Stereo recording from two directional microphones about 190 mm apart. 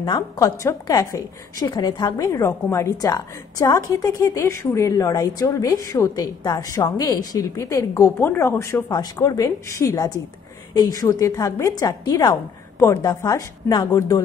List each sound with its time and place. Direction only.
0.0 s a woman's voice: 20° left (ahead or behind)